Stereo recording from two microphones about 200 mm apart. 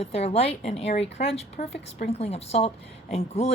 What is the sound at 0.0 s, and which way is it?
A woman's voice, 30° left (ahead or behind).